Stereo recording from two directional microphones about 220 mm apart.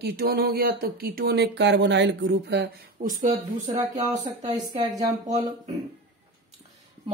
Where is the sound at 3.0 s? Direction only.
35° right (ahead or behind).